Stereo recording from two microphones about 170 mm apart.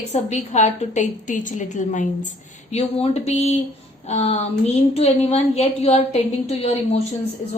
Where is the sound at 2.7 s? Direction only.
35° left (ahead or behind).